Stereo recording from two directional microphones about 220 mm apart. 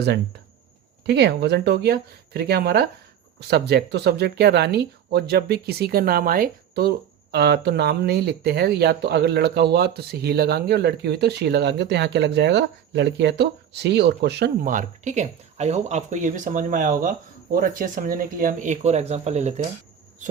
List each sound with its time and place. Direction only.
1.0 s speech: 50° right (ahead or behind); by 19.6 s 30° right (ahead or behind)